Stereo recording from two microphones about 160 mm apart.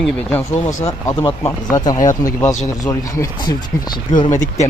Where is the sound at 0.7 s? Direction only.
50° left (ahead or behind).